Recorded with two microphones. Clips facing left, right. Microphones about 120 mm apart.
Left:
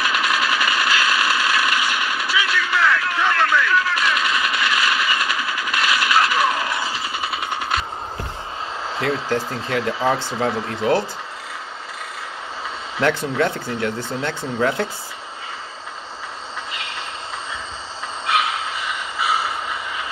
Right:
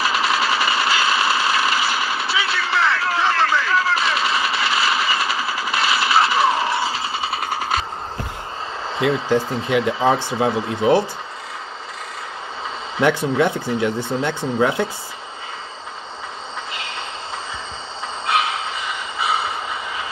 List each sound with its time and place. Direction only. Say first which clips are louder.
0.0 s a sound: right 1 dB; 35° right (ahead or behind)
9.3 s speech: right 4 dB; 15° right (ahead or behind)
13.0 s speech: right 2 dB; 15° right (ahead or behind)